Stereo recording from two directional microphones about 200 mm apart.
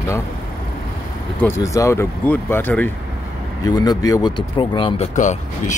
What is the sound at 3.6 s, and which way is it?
Speech, 20° left (ahead or behind).